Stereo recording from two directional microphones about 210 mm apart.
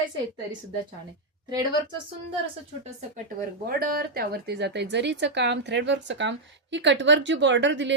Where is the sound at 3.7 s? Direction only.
45° right (ahead or behind).